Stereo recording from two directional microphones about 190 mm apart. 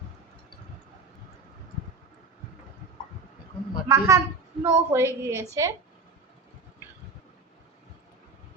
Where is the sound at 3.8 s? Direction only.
15° right (ahead or behind).